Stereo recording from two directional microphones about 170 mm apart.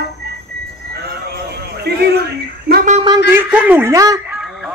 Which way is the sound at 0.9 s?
70° right (ahead or behind).